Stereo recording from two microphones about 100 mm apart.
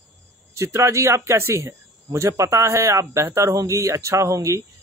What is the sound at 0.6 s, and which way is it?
Speech, 30° right (ahead or behind).